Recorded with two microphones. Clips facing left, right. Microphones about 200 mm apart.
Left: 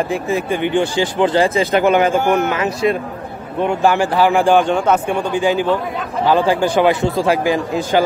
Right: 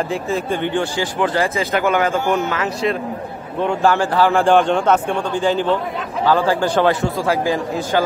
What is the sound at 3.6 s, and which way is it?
A man's voice, 15° left (ahead or behind).